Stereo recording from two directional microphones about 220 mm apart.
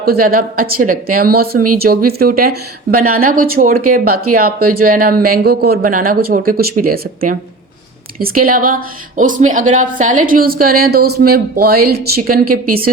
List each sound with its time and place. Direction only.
0.0 s a woman's voice: 45° right (ahead or behind)
8.4 s a woman's voice: 40° right (ahead or behind)